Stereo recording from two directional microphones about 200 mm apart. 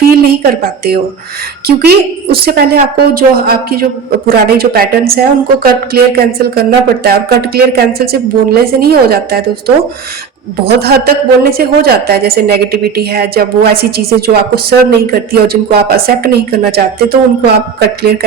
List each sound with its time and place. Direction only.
0.0 s a woman's voice: 50° right (ahead or behind)
10.7 s a woman's voice: 50° right (ahead or behind)